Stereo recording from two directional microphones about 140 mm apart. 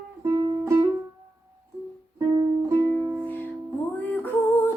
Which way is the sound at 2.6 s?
20° right (ahead or behind).